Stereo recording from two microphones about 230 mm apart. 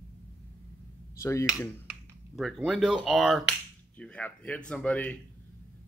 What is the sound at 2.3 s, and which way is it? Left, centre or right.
Speech, centre.